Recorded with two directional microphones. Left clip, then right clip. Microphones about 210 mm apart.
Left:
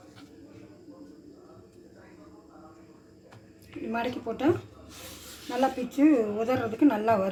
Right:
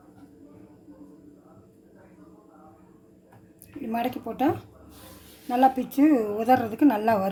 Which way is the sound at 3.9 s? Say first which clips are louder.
Right 2 dB; 60° right (ahead or behind).